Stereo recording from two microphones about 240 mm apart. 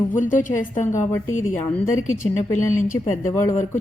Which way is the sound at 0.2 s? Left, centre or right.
Left.